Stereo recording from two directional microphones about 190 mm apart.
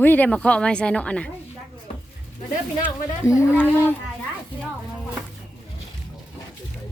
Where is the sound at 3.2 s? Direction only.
15° left (ahead or behind).